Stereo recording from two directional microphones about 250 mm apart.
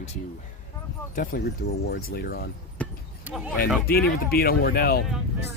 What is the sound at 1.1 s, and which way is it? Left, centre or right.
Speech, left.